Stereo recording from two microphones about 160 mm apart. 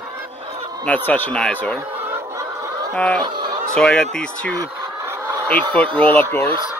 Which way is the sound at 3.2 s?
30° right (ahead or behind).